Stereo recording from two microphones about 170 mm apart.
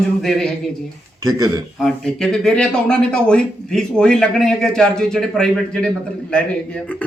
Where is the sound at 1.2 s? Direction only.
20° right (ahead or behind).